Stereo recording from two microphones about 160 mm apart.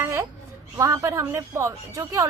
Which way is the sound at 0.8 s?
20° right (ahead or behind).